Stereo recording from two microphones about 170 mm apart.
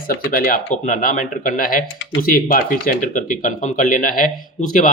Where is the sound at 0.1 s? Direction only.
55° left (ahead or behind).